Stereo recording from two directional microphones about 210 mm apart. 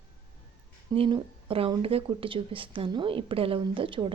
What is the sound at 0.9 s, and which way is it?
Speech, 25° right (ahead or behind).